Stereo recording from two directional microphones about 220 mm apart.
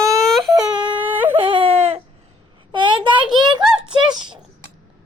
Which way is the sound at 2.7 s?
20° right (ahead or behind).